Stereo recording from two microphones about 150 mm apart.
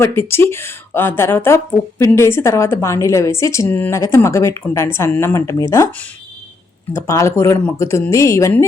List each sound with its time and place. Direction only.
0.0 s a woman's voice: 15° left (ahead or behind)